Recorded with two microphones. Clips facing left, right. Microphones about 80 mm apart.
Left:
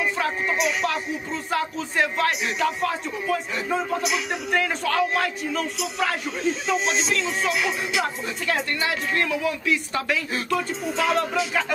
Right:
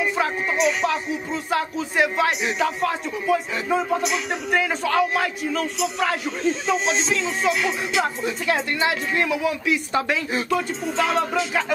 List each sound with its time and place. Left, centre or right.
0.0 s music: centre
0.6 s speech: centre
8.7 s speech: centre
9.9 s speech: right
10.5 s speech: centre